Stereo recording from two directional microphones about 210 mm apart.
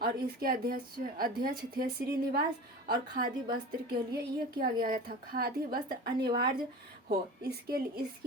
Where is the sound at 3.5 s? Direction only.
45° right (ahead or behind).